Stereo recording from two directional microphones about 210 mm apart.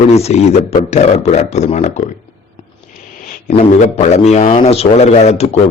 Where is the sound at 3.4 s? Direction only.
30° left (ahead or behind).